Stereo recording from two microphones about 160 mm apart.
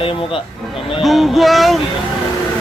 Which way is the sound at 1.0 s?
Centre (ahead or behind).